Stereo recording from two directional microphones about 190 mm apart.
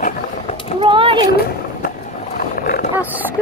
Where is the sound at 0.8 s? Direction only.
25° right (ahead or behind).